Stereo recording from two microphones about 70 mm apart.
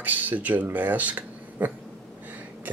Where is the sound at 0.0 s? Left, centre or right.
Right.